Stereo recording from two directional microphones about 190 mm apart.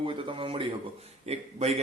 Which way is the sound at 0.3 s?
25° right (ahead or behind).